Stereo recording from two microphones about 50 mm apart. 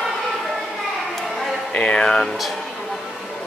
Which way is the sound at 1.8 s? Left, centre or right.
Centre.